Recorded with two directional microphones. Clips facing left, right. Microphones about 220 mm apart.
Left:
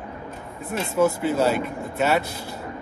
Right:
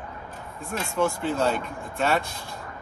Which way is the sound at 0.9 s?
5° left (ahead or behind).